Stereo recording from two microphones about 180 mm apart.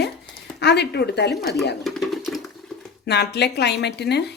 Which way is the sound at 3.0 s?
70° left (ahead or behind).